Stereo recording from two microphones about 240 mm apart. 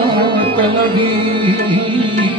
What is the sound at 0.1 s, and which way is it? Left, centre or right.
Music, right.